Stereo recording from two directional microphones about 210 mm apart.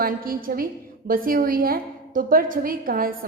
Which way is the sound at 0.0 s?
45° right (ahead or behind).